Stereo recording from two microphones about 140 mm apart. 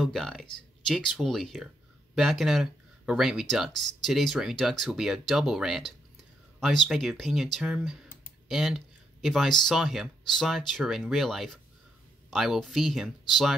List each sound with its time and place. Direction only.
0.0 s speech: centre (ahead or behind)